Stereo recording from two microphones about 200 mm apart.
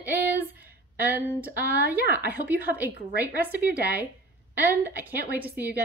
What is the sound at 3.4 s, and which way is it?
Speech, 10° right (ahead or behind).